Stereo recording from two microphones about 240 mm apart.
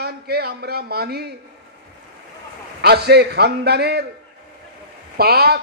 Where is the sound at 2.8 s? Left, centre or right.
Right.